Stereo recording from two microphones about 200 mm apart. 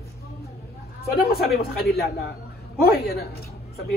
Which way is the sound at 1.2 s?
50° left (ahead or behind).